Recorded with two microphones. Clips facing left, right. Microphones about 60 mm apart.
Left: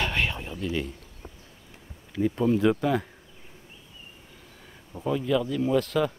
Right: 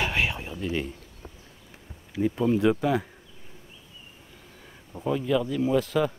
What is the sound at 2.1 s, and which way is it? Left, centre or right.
Speech, centre.